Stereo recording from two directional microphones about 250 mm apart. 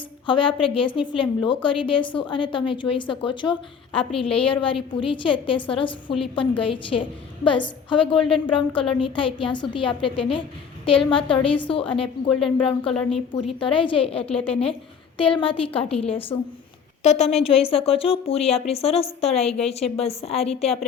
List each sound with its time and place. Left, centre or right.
0.3 s a woman's voice: left
12.9 s a woman's voice: centre
13.6 s a woman's voice: left